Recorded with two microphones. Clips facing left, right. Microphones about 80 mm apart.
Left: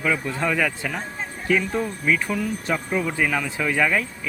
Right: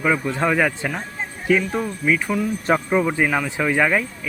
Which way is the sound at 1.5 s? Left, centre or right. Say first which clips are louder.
Right 2 dB; centre.